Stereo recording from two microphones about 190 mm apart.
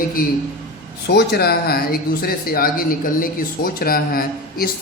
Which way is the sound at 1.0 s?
60° left (ahead or behind).